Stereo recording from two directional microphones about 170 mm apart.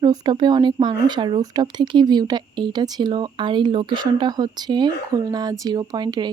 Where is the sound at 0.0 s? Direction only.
25° right (ahead or behind).